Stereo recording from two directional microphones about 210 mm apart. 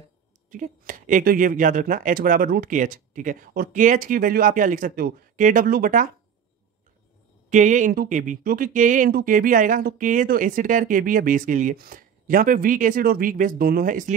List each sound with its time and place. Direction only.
0.5 s speech: 40° right (ahead or behind)
7.4 s speech: 35° right (ahead or behind)